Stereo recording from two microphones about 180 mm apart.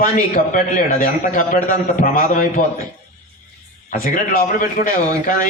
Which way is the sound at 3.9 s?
50° left (ahead or behind).